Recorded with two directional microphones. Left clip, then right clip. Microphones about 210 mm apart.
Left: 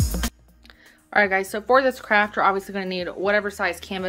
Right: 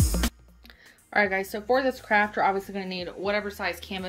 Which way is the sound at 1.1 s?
5° left (ahead or behind).